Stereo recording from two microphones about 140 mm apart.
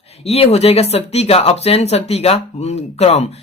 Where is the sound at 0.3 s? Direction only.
50° left (ahead or behind).